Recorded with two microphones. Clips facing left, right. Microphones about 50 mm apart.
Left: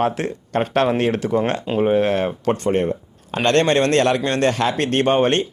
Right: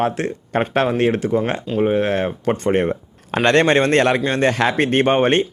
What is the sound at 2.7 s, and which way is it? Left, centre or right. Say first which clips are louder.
Speech: right 1 dB; right.